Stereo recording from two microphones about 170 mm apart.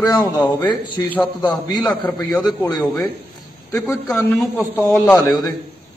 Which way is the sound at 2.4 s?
25° left (ahead or behind).